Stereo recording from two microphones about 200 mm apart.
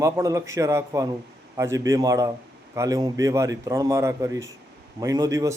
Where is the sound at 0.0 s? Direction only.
15° right (ahead or behind).